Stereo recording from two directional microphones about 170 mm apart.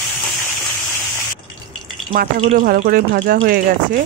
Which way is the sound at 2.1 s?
50° right (ahead or behind).